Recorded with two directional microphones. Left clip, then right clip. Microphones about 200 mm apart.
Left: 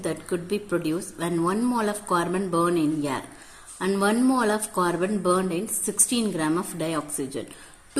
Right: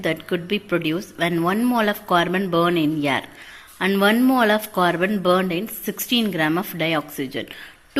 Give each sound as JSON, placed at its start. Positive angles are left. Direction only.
{"t": 0.0, "sound": "speech", "side_deg": -20}